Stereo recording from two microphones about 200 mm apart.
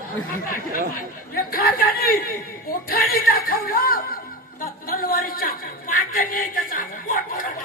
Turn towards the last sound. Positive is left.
turn(degrees=45)  # may be behind; listen again after turning